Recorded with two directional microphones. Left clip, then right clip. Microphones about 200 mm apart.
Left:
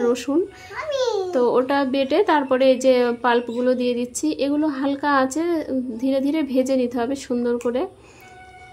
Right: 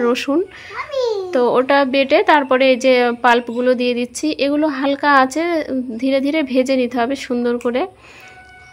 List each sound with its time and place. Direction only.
0.0 s a child's voice: 20° right (ahead or behind)